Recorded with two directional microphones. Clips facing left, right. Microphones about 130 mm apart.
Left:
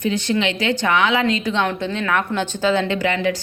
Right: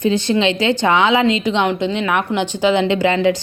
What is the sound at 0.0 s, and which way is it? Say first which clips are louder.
Speech: right 4 dB; 30° right (ahead or behind).